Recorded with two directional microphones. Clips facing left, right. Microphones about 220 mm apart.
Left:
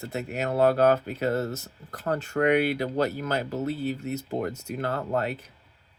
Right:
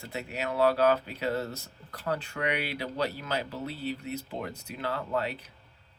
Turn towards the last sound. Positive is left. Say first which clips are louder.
# left 3 dB
turn(degrees=45)  # may be behind; listen again after turning